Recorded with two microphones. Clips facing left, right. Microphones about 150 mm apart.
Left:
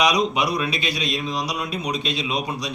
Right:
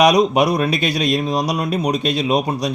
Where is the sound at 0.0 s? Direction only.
50° right (ahead or behind).